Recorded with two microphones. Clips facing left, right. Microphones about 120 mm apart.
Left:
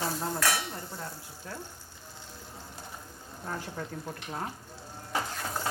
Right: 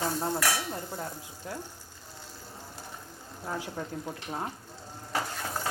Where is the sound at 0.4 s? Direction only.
15° right (ahead or behind).